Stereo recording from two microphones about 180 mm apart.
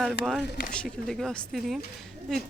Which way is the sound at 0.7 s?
5° left (ahead or behind).